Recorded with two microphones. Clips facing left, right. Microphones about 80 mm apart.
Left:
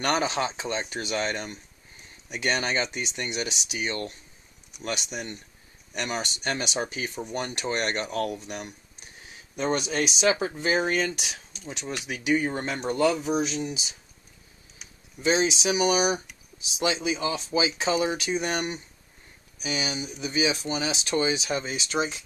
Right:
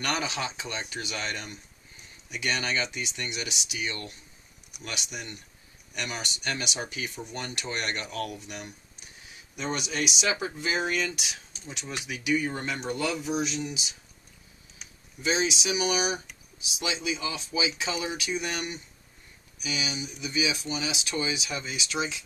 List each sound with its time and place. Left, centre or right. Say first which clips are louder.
0.0 s speech: left 5 dB; left
7.2 s speech: left 5 dB; left
15.2 s speech: left 4 dB; left